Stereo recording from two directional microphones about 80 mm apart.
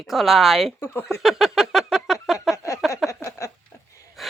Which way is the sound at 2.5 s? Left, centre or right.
Left.